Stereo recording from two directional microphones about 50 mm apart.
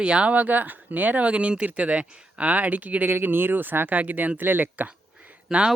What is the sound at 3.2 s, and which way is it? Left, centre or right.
Speech, right.